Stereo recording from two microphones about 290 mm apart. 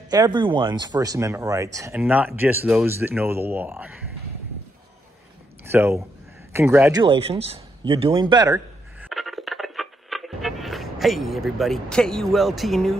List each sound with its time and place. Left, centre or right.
0.1 s speech: centre
5.7 s speech: centre
9.0 s music: centre